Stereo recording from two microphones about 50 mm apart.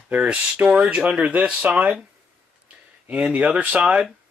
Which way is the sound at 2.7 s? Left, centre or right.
Right.